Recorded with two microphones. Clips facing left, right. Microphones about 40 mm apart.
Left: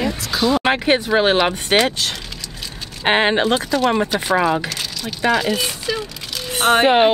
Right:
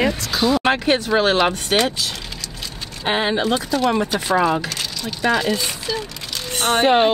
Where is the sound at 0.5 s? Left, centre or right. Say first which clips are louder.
Left 1 dB; centre.